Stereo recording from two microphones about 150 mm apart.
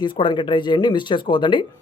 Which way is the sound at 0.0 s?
30° left (ahead or behind).